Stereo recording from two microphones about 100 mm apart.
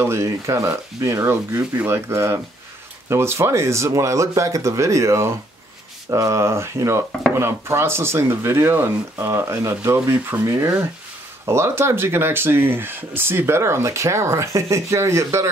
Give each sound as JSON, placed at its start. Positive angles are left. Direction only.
{"t": 0.0, "sound": "speech", "side_deg": -25}